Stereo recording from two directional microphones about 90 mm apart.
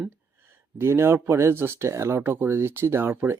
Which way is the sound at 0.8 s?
25° right (ahead or behind).